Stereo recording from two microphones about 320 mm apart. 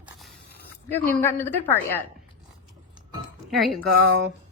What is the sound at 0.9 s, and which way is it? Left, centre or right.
A woman's voice, centre.